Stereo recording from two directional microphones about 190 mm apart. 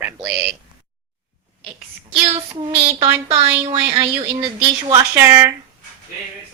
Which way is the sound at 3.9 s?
20° right (ahead or behind).